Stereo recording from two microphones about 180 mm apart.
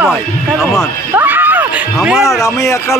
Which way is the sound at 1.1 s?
10° right (ahead or behind).